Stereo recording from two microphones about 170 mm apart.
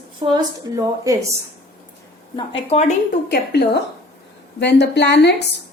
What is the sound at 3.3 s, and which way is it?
Speech, 70° left (ahead or behind).